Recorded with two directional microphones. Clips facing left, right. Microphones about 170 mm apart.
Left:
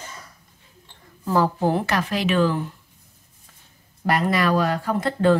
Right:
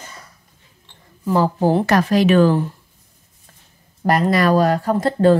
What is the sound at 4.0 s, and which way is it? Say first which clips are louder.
Speech: right 5 dB; 40° right (ahead or behind).